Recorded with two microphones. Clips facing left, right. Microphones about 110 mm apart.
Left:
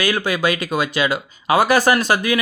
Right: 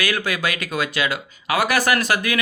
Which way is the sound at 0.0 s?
20° left (ahead or behind).